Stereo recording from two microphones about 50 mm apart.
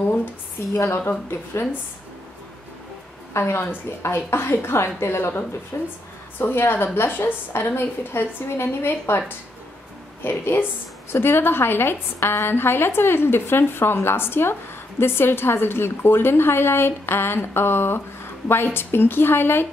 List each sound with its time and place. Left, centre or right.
0.6 s a woman's voice: left
3.3 s a woman's voice: left
5.7 s speech: left
6.7 s a woman's voice: left
10.2 s a woman's voice: left